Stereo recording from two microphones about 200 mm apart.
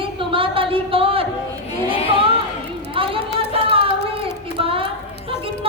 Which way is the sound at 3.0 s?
25° right (ahead or behind).